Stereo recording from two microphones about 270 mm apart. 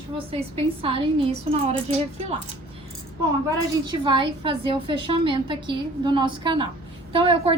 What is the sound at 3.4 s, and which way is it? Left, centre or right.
A woman's voice, centre.